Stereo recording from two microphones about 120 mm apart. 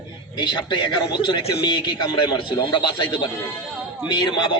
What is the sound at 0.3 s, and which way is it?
A man's voice, 40° left (ahead or behind).